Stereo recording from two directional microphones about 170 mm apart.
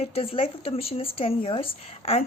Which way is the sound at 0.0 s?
35° left (ahead or behind).